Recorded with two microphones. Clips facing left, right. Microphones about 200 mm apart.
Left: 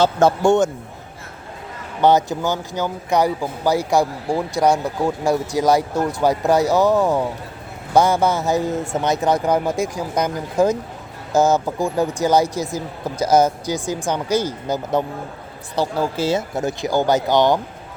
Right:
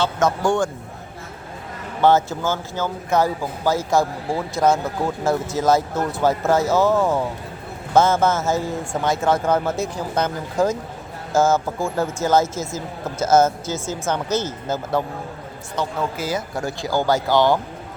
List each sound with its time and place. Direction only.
0.0 s speech: 30° left (ahead or behind)
2.0 s speech: 15° left (ahead or behind)
15.7 s speech: 35° left (ahead or behind)